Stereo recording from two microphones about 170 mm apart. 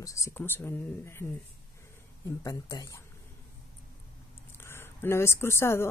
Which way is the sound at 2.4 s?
20° left (ahead or behind).